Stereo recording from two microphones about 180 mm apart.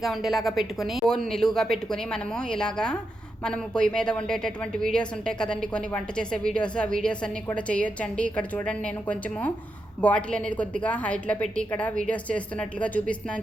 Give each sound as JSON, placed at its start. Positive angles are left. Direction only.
{"t": 0.0, "sound": "a woman's voice", "side_deg": 0}